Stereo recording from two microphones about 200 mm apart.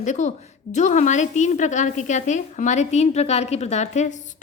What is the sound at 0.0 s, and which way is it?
A woman's voice, 35° left (ahead or behind).